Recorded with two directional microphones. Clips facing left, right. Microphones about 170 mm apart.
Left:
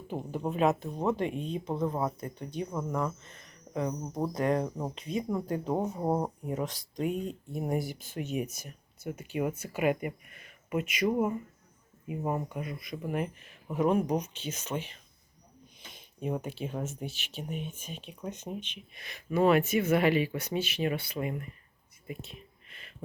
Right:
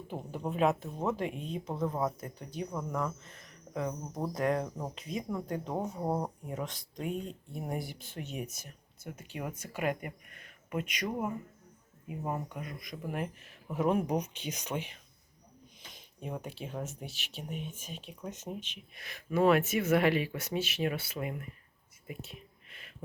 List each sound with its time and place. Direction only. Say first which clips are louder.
0.1 s speech: left 4 dB; centre (ahead or behind)
6.1 s speech: left 4 dB; 20° left (ahead or behind)
6.5 s speech: left 5 dB; centre (ahead or behind)
15.9 s speech: left 7 dB; centre (ahead or behind)
22.0 s whispering: left 2 dB; 5° right (ahead or behind)